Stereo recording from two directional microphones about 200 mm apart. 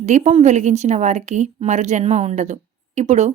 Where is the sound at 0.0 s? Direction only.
35° right (ahead or behind).